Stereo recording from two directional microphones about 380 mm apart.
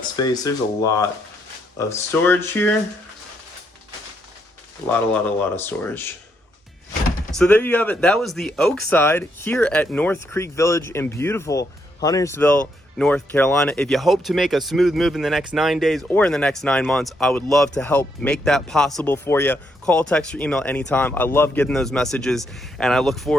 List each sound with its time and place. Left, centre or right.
0.2 s speech: centre
4.9 s speech: centre
7.3 s speech: centre